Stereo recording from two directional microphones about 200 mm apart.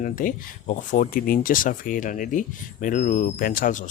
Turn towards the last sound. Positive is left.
turn(degrees=45)  # may be behind; listen again after turning